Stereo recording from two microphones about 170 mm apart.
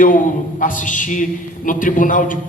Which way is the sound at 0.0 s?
50° left (ahead or behind).